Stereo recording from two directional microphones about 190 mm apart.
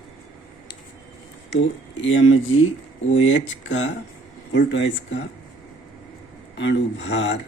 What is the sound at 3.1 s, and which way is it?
Speech, 75° left (ahead or behind).